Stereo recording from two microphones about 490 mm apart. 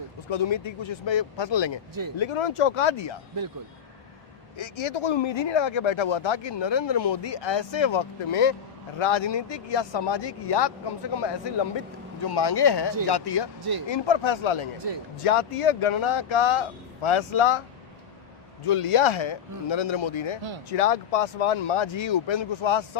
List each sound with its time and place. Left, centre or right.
0.3 s speech: left
2.1 s speech: left
4.5 s speech: left
9.0 s speech: left
13.8 s speech: left
15.2 s speech: left
18.7 s speech: left
21.3 s speech: left